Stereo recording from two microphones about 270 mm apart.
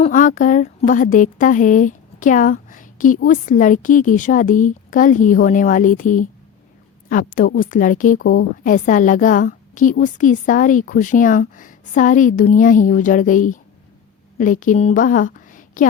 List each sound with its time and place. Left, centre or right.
0.0 s a woman's voice: left